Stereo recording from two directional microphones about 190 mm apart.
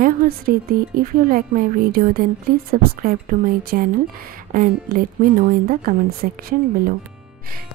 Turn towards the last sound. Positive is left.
turn(degrees=-50)  # may be behind; listen again after turning